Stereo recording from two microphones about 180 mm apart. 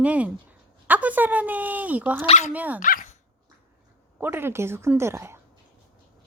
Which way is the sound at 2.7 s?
50° left (ahead or behind).